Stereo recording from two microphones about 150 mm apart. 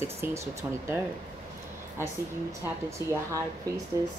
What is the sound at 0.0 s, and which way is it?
Speech, 20° right (ahead or behind).